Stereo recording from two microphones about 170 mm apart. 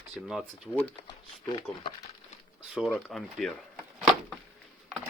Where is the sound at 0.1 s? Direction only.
Centre (ahead or behind).